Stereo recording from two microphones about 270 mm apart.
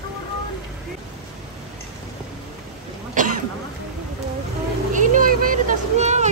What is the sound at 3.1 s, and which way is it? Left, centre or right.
Cough, right.